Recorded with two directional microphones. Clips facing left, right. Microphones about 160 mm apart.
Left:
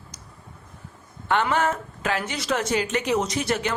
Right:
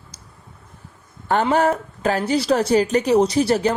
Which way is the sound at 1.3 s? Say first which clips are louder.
Right 5 dB; 35° right (ahead or behind).